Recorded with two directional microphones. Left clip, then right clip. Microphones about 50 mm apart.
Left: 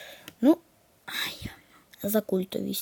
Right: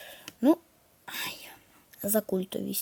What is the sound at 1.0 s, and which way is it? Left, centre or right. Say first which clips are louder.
Whispering: left 4 dB; left.